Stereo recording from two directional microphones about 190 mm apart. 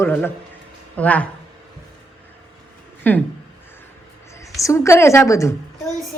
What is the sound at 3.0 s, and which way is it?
Speech, 10° left (ahead or behind).